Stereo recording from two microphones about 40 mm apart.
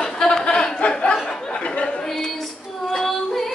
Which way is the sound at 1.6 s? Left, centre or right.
Left.